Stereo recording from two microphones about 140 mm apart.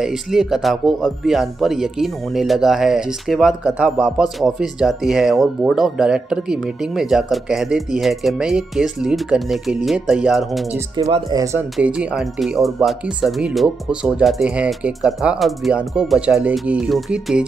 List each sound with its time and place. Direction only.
0.0 s speech: 5° right (ahead or behind)
11.2 s speech: 25° right (ahead or behind)
11.7 s speech: 10° right (ahead or behind)